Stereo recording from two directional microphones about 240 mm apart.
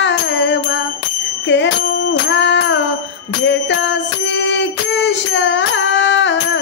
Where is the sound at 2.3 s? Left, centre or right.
Left.